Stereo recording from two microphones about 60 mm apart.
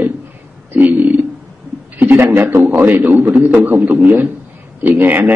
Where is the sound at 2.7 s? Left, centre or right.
Right.